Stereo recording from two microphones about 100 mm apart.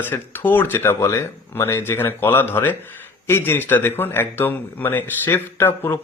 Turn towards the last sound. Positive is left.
turn(degrees=25)  # may be behind; listen again after turning